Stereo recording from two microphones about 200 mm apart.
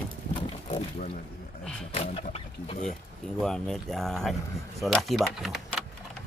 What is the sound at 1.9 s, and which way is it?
Speech, 30° left (ahead or behind).